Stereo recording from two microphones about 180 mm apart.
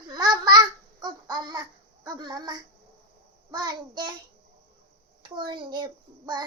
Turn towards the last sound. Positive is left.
turn(degrees=-25)  # may be behind; listen again after turning